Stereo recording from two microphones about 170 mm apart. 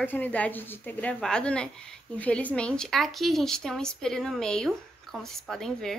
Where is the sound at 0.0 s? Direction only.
10° left (ahead or behind).